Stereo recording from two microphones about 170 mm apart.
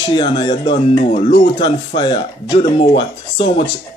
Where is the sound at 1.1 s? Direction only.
40° left (ahead or behind).